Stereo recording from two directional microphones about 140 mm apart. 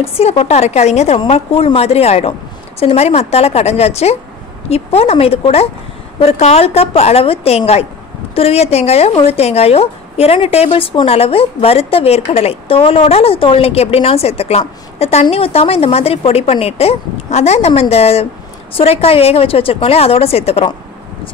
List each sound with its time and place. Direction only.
0.0 s speech: 45° left (ahead or behind)